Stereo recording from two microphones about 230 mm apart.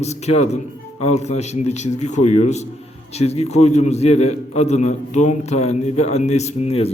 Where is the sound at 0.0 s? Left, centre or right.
Left.